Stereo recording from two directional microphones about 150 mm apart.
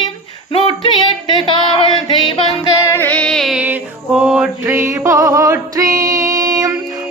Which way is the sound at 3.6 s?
10° right (ahead or behind).